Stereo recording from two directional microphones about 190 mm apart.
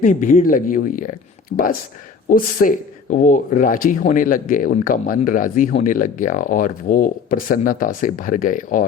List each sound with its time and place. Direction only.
0.0 s speech: 45° left (ahead or behind)